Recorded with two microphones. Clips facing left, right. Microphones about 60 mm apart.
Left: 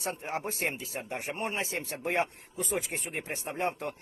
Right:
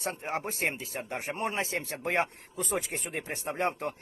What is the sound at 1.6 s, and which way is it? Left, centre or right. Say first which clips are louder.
Speech: right 1 dB; right.